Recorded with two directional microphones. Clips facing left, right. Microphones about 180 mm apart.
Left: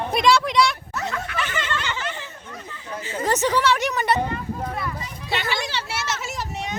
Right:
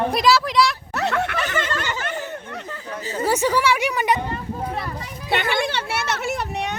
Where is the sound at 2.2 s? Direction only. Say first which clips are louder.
Right 7 dB; 70° right (ahead or behind).